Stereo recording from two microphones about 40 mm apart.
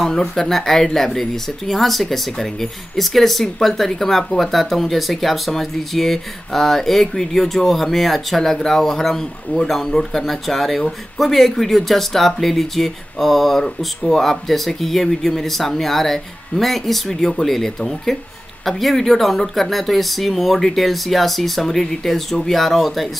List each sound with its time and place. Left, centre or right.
0.2 s speech: centre